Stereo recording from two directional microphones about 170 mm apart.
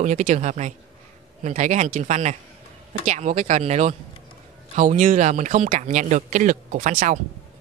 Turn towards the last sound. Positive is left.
turn(degrees=-50)  # may be behind; listen again after turning